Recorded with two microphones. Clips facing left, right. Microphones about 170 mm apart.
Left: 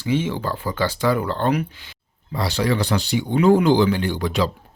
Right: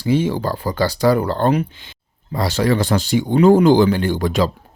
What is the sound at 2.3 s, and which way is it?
Speech, 45° right (ahead or behind).